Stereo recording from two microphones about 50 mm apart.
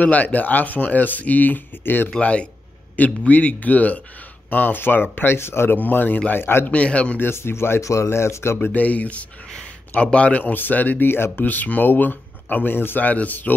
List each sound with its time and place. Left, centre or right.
0.0 s speech: left
2.0 s speech: left
5.8 s speech: left
6.3 s speech: left
6.7 s speech: left
7.2 s speech: left
7.8 s speech: left
8.7 s speech: left